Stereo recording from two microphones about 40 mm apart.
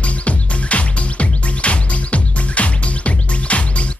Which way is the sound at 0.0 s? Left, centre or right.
Left.